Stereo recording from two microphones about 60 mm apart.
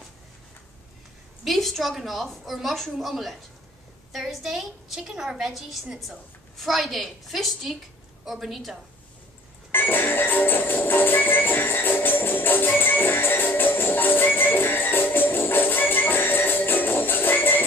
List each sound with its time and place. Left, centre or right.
1.4 s a woman's voice: centre
9.7 s music: left